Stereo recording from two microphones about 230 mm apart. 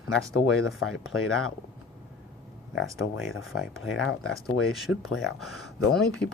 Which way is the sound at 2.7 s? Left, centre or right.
Left.